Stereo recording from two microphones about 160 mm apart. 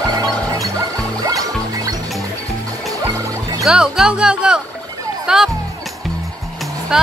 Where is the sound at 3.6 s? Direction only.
5° right (ahead or behind).